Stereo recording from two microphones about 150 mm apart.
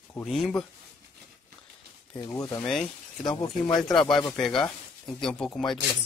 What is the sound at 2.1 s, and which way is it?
Speech, 25° left (ahead or behind).